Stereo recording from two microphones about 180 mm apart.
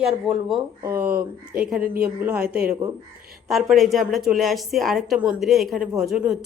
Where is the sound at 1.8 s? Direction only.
60° right (ahead or behind).